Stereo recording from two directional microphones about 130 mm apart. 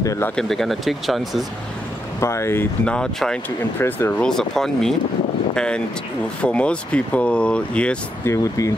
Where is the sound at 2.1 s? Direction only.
20° left (ahead or behind).